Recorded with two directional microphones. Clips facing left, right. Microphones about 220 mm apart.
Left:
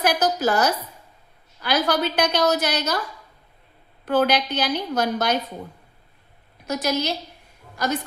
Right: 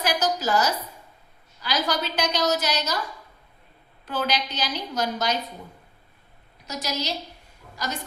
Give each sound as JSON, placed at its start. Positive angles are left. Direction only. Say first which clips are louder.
{"t": 0.0, "sound": "a woman's voice", "louder": "left 4 dB", "side_deg": 55}
{"t": 4.0, "sound": "a woman's voice", "louder": "left 7 dB", "side_deg": 55}
{"t": 6.7, "sound": "a woman's voice", "louder": "left 6 dB", "side_deg": 55}